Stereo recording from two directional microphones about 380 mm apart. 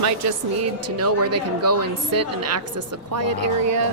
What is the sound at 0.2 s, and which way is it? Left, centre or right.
A woman's voice, right.